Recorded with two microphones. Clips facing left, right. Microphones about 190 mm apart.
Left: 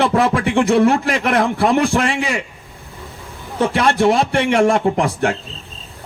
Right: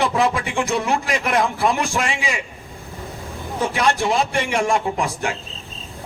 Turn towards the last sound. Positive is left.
turn(degrees=60)  # may be behind; listen again after turning